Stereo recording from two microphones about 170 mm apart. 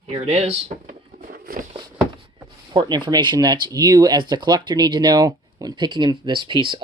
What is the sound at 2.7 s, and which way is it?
Speech, 30° right (ahead or behind).